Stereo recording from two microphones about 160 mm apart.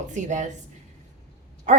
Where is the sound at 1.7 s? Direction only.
50° right (ahead or behind).